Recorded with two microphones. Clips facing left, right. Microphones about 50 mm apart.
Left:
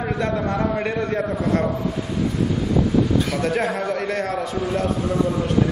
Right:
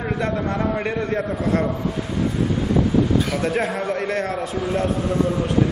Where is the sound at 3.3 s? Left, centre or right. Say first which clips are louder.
Even; centre.